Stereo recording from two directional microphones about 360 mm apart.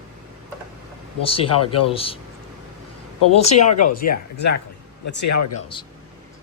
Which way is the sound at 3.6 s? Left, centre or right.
Left.